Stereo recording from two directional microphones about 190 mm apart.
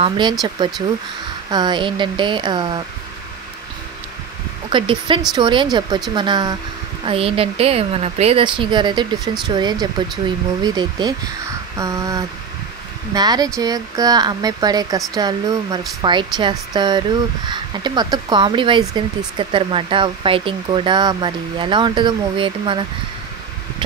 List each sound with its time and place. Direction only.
0.0 s speech: 25° right (ahead or behind)
4.6 s speech: 25° right (ahead or behind)
11.7 s a sound: 15° right (ahead or behind)
13.1 s speech: 20° right (ahead or behind)